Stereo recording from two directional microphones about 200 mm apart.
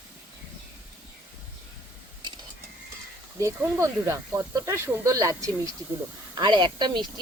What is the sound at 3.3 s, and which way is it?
Speech, 15° right (ahead or behind).